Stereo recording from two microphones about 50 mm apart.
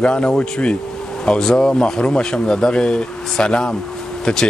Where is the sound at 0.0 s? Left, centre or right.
Centre.